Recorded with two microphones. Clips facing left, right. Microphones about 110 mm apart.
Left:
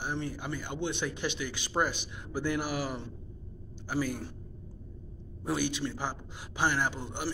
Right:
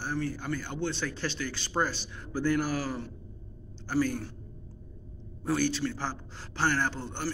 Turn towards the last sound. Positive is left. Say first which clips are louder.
# right 1 dB
turn(degrees=10)  # may be behind; listen again after turning